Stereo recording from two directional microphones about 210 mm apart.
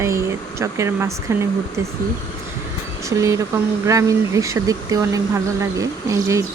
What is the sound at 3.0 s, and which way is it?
Speech, 15° right (ahead or behind).